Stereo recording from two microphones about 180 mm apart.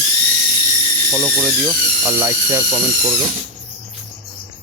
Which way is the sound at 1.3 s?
10° right (ahead or behind).